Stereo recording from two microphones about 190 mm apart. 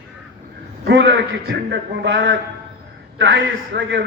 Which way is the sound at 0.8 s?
70° right (ahead or behind).